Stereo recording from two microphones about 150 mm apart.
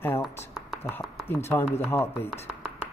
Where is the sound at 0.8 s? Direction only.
15° left (ahead or behind).